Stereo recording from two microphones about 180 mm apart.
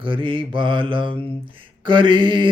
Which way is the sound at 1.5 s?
30° right (ahead or behind).